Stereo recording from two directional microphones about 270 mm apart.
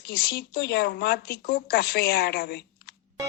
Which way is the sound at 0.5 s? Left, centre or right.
Left.